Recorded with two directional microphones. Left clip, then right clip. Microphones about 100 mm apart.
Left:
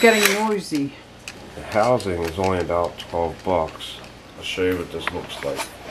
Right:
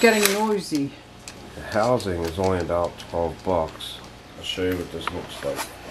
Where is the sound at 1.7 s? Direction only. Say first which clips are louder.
Left 3 dB; 15° right (ahead or behind).